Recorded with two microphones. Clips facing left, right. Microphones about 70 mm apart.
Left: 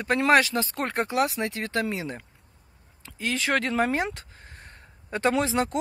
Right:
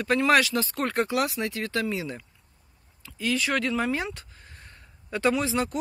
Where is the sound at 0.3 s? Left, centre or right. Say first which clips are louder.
Left 3 dB; left.